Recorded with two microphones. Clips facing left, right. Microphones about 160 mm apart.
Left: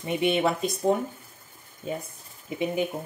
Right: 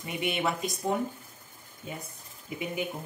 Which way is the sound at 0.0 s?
30° left (ahead or behind).